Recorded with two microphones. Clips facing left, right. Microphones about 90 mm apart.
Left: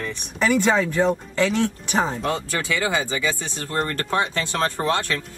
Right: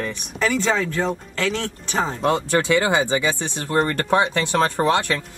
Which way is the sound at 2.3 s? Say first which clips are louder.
Right 6 dB; 25° right (ahead or behind).